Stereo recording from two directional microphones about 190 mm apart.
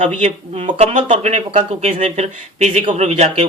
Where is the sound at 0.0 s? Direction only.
35° right (ahead or behind).